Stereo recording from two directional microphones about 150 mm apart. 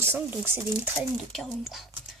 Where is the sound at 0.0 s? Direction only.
15° right (ahead or behind).